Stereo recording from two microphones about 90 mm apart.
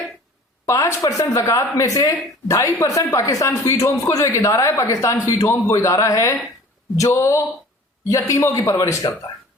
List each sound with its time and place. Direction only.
0.6 s a woman's voice: 35° left (ahead or behind)